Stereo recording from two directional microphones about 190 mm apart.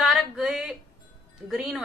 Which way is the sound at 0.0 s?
Centre (ahead or behind).